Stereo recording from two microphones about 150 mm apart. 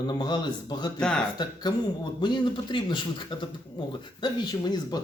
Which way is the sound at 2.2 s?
30° left (ahead or behind).